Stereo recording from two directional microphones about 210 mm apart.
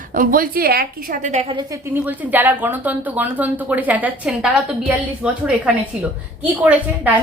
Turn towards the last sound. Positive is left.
turn(degrees=-5)  # may be behind; listen again after turning